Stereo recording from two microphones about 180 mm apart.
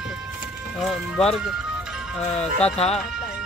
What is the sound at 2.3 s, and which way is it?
Speech, 35° left (ahead or behind).